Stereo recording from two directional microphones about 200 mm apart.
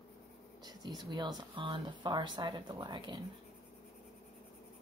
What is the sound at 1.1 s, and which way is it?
Speech, 20° right (ahead or behind).